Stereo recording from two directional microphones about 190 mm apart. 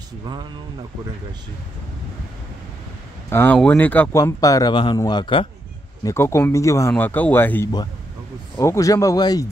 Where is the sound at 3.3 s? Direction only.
10° left (ahead or behind); by 5.5 s 25° left (ahead or behind).